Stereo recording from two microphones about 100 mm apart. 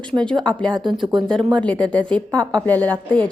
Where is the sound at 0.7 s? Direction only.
50° right (ahead or behind).